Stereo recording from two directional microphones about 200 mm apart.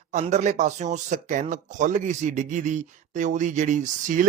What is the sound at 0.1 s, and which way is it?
Speech, 35° right (ahead or behind).